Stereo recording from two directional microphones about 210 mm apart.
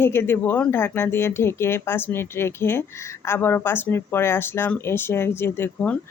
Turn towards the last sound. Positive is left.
turn(degrees=10)  # may be behind; listen again after turning